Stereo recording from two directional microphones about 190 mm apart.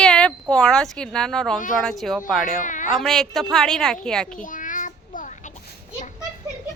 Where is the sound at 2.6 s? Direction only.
40° left (ahead or behind).